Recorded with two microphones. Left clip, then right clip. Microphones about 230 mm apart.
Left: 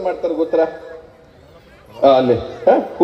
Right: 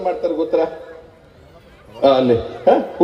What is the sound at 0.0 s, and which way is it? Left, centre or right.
Speech, right.